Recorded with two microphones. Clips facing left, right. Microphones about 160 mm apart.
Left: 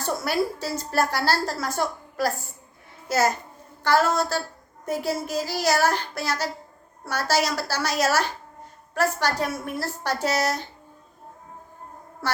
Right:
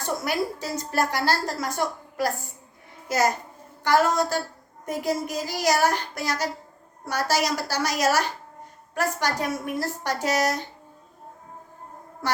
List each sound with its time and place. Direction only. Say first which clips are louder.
0.0 s a woman's voice: left 2 dB; 15° right (ahead or behind)
12.2 s a woman's voice: even; 15° right (ahead or behind)